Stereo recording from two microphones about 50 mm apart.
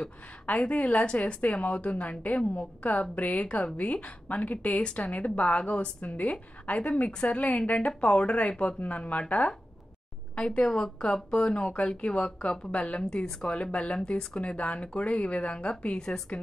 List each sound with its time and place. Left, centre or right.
0.5 s a woman's voice: left
7.1 s speech: centre
7.3 s a woman's voice: left
10.3 s a woman's voice: centre